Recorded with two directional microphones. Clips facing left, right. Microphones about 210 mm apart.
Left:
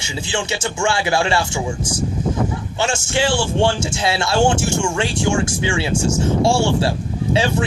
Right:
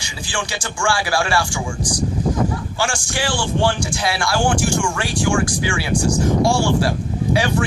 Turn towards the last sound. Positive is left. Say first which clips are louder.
# even
turn(degrees=25)  # may be behind; listen again after turning